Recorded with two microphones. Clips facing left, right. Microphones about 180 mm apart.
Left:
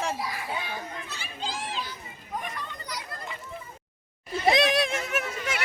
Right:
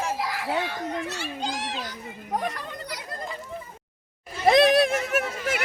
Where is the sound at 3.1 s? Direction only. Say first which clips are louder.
Right 4 dB; 35° right (ahead or behind).